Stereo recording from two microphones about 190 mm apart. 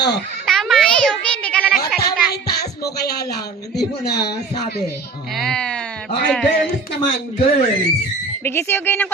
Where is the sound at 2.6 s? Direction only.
60° left (ahead or behind).